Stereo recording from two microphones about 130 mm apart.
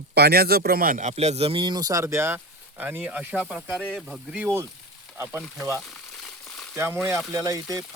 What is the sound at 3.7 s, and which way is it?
Speech, 5° left (ahead or behind).